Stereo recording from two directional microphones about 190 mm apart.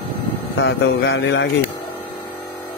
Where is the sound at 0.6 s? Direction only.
70° left (ahead or behind).